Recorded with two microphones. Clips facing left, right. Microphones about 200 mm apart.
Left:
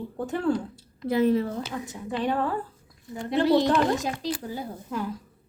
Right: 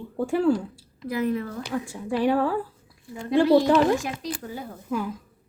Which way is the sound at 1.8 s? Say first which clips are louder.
Right 6 dB; 10° right (ahead or behind).